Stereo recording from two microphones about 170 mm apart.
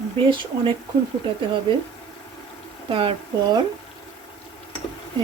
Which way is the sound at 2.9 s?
30° right (ahead or behind).